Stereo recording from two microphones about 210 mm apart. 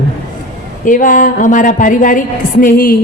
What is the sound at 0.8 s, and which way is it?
A woman's voice, 40° left (ahead or behind).